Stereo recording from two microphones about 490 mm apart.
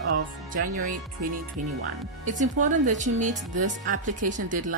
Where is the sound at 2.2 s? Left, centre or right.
Centre.